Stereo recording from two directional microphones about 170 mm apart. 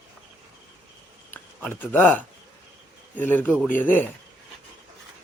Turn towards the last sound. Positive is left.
turn(degrees=10)  # may be behind; listen again after turning